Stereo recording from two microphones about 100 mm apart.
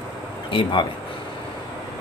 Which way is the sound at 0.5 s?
55° left (ahead or behind).